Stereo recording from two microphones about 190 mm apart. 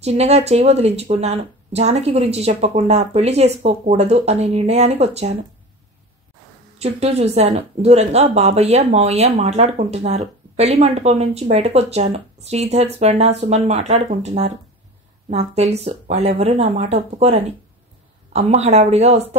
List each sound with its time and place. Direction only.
0.0 s speech: 35° right (ahead or behind)
6.8 s speech: 35° right (ahead or behind)